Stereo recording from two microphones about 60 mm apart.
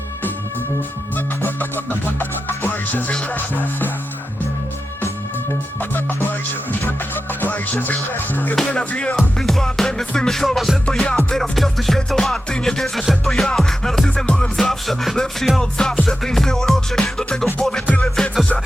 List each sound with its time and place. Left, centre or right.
1.4 s music: left
5.8 s music: left
7.4 s speech: left
8.1 s music: left
8.7 s speech: centre
9.1 s music: centre
14.3 s music: centre
14.6 s music: centre